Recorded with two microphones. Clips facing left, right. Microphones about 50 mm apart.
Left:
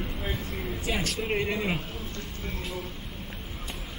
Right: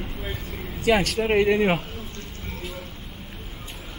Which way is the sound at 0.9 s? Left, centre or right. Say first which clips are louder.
Right 10 dB; right.